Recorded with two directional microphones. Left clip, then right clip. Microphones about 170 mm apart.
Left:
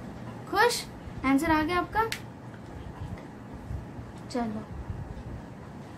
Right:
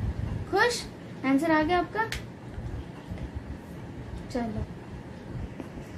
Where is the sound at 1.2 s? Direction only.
30° left (ahead or behind).